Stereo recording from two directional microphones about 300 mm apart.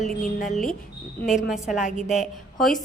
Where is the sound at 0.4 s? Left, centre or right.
Centre.